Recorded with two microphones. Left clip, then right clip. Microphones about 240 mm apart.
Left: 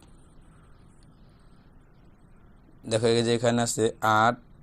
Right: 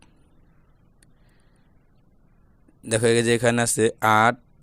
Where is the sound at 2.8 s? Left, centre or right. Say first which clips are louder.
Right 4 dB; right.